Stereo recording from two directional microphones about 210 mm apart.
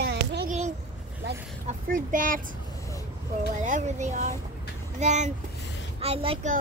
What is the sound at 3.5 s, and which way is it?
A child's voice, 35° right (ahead or behind).